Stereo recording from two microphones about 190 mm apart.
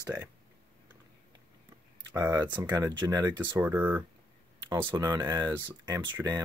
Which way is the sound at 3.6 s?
10° right (ahead or behind).